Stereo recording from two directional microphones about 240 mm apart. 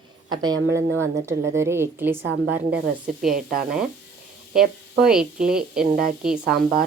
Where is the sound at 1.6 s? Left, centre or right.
Centre.